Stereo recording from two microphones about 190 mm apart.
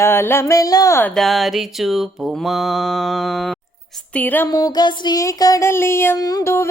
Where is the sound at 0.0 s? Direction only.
10° left (ahead or behind).